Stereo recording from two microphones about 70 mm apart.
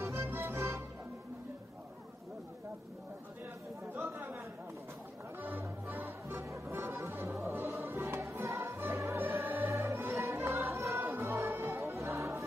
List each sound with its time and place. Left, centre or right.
0.0 s music: right
3.9 s chatter: right
5.4 s music: right
8.3 s music: right